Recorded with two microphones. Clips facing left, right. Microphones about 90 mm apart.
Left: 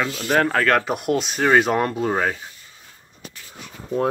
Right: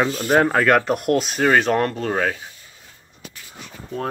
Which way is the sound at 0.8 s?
Centre (ahead or behind).